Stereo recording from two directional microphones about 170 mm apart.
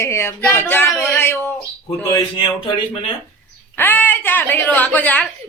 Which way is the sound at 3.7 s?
10° left (ahead or behind).